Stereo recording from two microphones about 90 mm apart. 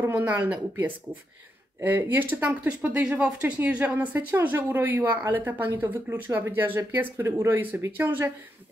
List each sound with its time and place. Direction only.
0.0 s speech: 25° right (ahead or behind)